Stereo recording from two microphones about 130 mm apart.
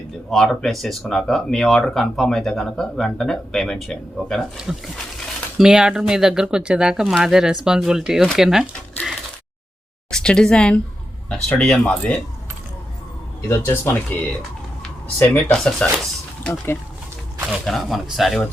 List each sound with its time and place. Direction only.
0.3 s speech: 5° left (ahead or behind)
9.0 s a sound: centre (ahead or behind)
10.1 s speech: 5° left (ahead or behind)
13.5 s speech: 20° left (ahead or behind)
15.5 s speech: 5° left (ahead or behind)
17.5 s speech: centre (ahead or behind)